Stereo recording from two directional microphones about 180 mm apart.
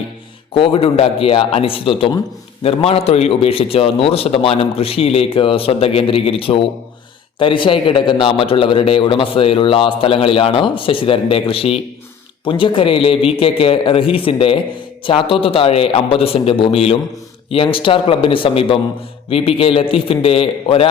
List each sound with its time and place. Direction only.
0.5 s a man's voice: 30° left (ahead or behind)